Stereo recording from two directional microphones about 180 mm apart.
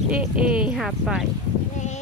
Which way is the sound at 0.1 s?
5° right (ahead or behind).